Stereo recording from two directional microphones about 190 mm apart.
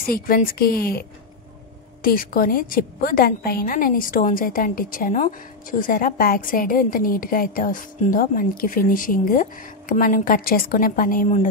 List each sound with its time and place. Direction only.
0.0 s a woman's voice: 50° left (ahead or behind)